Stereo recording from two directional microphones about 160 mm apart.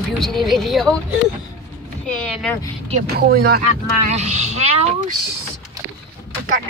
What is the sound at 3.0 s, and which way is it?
Speech, 70° right (ahead or behind).